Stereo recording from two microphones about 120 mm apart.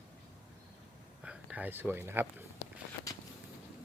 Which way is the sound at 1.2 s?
10° right (ahead or behind).